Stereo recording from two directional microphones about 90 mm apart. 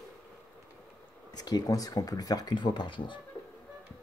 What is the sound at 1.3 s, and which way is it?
Speech, 45° left (ahead or behind).